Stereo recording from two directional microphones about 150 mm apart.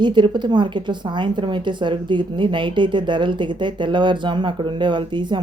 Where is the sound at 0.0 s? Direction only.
30° right (ahead or behind).